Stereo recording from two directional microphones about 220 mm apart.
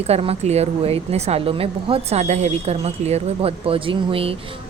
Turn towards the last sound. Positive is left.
turn(degrees=-25)  # may be behind; listen again after turning